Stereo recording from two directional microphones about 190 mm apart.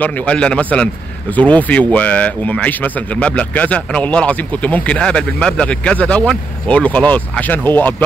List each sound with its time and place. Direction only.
0.0 s speech: 5° left (ahead or behind)